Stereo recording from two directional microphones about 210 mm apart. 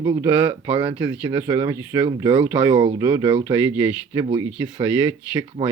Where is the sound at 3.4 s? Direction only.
10° right (ahead or behind).